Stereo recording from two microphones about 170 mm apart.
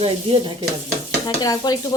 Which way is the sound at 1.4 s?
25° left (ahead or behind).